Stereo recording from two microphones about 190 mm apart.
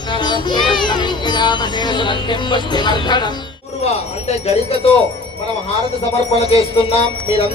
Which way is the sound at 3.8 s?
35° left (ahead or behind).